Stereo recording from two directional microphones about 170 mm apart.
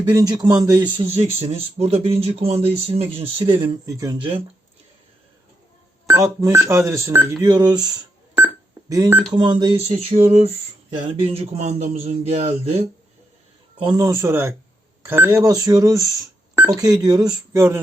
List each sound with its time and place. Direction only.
0.0 s speech: 20° right (ahead or behind)
0.9 s speech: 35° right (ahead or behind); by 4.3 s 20° right (ahead or behind)
6.1 s speech: 15° right (ahead or behind)
8.9 s speech: 20° right (ahead or behind); by 12.8 s 40° right (ahead or behind)
13.7 s speech: 25° right (ahead or behind)